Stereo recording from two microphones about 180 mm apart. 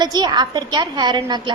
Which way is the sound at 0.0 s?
25° right (ahead or behind).